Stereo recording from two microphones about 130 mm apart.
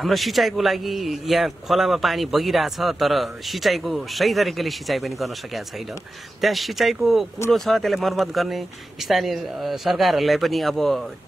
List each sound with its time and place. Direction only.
0.0 s a man's voice: centre (ahead or behind)